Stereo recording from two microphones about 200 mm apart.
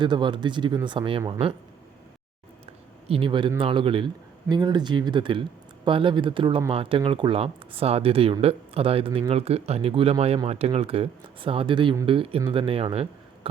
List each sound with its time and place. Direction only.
0.0 s speech: 25° right (ahead or behind)
3.1 s speech: 25° right (ahead or behind)